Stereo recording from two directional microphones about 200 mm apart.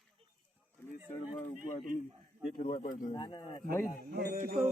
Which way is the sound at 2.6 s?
40° left (ahead or behind).